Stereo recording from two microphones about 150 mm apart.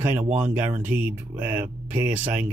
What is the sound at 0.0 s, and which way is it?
Speech, 15° right (ahead or behind).